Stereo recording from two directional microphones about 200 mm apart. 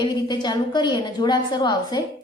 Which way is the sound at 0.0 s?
20° left (ahead or behind).